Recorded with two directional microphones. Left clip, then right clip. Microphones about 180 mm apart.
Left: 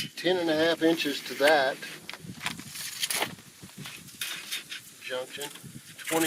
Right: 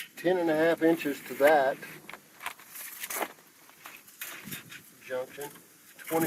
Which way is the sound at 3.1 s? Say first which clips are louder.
Left 3 dB; 15° left (ahead or behind).